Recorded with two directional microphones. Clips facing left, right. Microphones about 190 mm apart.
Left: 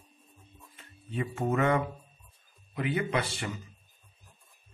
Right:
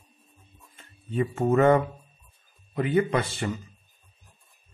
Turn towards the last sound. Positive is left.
turn(degrees=-40)  # may be behind; listen again after turning